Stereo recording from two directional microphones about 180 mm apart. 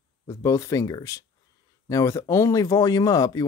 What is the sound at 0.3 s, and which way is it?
Speech, 15° left (ahead or behind).